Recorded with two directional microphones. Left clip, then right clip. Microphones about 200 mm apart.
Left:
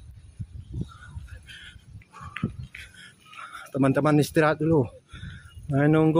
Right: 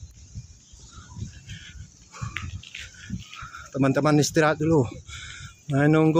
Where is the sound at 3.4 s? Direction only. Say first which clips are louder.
Even; 10° left (ahead or behind).